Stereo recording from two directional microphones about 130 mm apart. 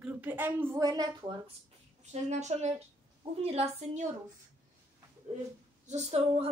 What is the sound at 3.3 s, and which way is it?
Speech, 55° right (ahead or behind).